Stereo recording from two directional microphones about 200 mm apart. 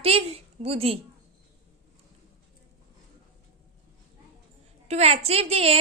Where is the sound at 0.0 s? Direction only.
30° right (ahead or behind).